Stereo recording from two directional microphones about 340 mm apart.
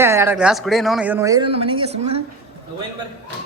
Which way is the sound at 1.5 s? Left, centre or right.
Centre.